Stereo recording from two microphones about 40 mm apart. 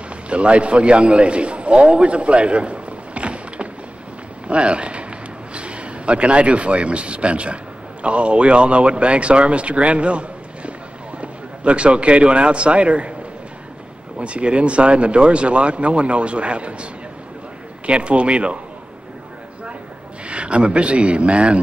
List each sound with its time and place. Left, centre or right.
0.3 s a man's voice: right
14.1 s speech: right
17.8 s speech: right
20.2 s speech: right